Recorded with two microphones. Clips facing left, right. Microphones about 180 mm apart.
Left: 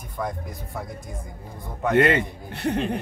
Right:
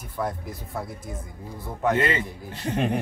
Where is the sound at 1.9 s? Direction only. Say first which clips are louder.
Left 9 dB; 60° left (ahead or behind).